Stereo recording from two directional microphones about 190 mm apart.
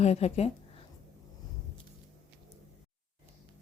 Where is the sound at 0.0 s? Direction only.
35° left (ahead or behind).